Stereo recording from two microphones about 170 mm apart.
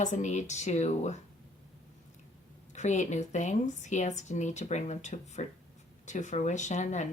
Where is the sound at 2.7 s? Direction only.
45° left (ahead or behind).